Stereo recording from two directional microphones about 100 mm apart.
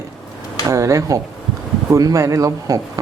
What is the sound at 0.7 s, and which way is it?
Speech, 30° right (ahead or behind).